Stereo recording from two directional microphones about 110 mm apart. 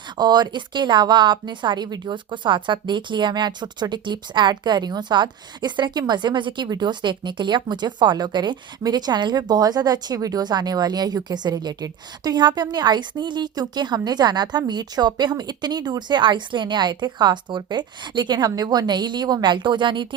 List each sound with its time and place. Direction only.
0.2 s a woman's voice: 40° right (ahead or behind)